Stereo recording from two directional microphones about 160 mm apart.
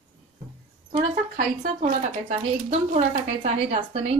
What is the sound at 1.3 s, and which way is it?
A woman's voice, 50° right (ahead or behind).